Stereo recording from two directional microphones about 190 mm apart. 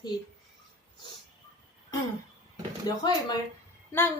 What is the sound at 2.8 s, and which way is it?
Speech, 20° left (ahead or behind).